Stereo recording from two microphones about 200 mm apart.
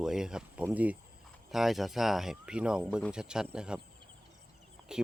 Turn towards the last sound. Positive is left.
turn(degrees=-5)  # may be behind; listen again after turning